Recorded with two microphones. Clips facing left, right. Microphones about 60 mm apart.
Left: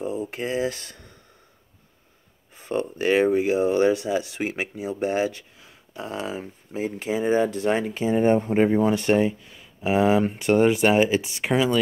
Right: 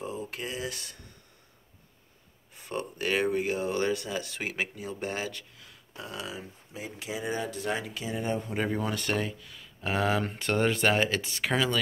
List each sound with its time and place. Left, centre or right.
0.0 s a sound: centre
0.3 s speech: left
2.5 s speech: left
8.5 s speech: left